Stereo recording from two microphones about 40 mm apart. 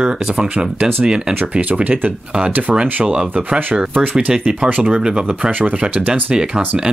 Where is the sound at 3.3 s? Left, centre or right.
Right.